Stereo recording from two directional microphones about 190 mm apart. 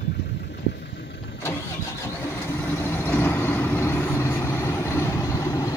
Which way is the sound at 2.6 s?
10° left (ahead or behind).